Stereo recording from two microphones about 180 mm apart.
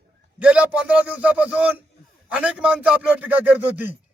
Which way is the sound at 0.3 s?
5° right (ahead or behind).